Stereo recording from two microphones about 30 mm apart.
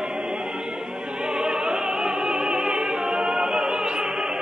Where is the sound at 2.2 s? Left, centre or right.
Right.